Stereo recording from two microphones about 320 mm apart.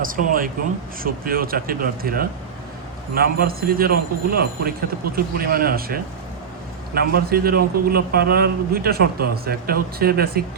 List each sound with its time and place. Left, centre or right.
0.0 s a man's voice: right